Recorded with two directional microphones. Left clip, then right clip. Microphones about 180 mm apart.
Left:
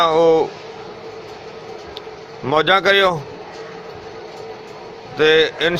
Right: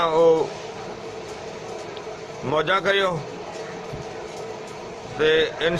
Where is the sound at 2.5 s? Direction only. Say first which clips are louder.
Left 7 dB; 45° left (ahead or behind).